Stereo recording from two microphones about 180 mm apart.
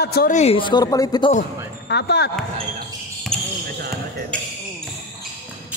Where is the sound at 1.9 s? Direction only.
70° left (ahead or behind).